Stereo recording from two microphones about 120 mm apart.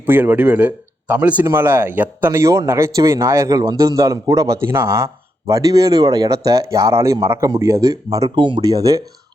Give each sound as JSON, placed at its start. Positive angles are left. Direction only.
{"t": 0.0, "sound": "speech", "side_deg": -15}
{"t": 8.4, "sound": "speech", "side_deg": -45}
{"t": 8.7, "sound": "speech", "side_deg": -30}